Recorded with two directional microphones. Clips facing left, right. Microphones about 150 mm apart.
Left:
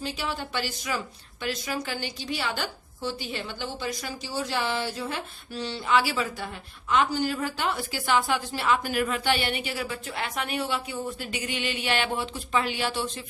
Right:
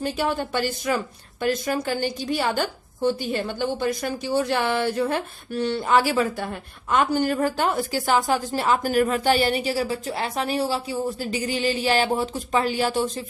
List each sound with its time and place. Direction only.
0.0 s a woman's voice: 50° right (ahead or behind)